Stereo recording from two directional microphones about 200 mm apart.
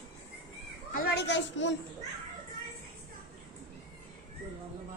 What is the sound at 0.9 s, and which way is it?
Speech, 60° left (ahead or behind).